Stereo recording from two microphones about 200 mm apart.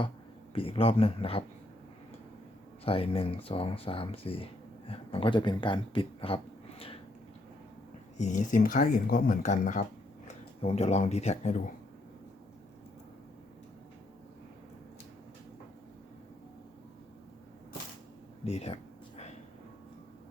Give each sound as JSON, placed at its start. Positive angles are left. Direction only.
{"t": 0.5, "sound": "speech", "side_deg": 30}
{"t": 2.8, "sound": "speech", "side_deg": 30}
{"t": 8.2, "sound": "speech", "side_deg": 40}
{"t": 18.4, "sound": "a sound", "side_deg": 30}